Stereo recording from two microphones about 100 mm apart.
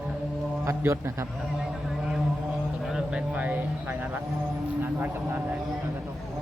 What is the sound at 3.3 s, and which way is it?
Speech, 15° right (ahead or behind).